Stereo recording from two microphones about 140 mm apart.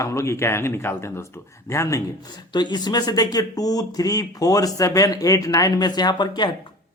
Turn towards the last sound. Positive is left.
turn(degrees=35)  # may be behind; listen again after turning